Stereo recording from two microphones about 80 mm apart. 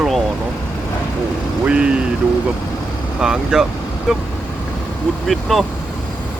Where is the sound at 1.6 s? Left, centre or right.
Centre.